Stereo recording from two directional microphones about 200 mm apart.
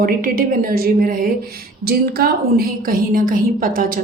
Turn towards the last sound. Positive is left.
turn(degrees=-45)  # may be behind; listen again after turning